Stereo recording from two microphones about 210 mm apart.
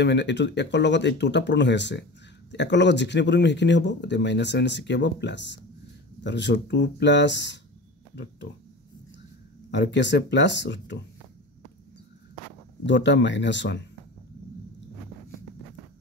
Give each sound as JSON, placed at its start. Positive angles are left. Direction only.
{"t": 0.0, "sound": "speech", "side_deg": 55}
{"t": 9.7, "sound": "speech", "side_deg": 60}
{"t": 12.8, "sound": "speech", "side_deg": 60}